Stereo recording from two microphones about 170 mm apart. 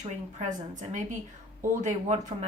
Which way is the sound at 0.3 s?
45° right (ahead or behind).